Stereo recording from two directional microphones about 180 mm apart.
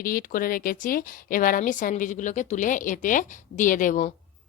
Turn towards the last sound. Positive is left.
turn(degrees=45)  # may be behind; listen again after turning